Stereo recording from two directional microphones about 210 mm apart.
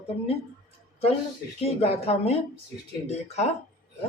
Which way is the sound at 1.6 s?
30° left (ahead or behind).